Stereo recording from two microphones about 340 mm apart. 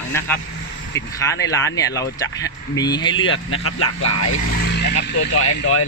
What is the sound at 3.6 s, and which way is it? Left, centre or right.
Speech, left.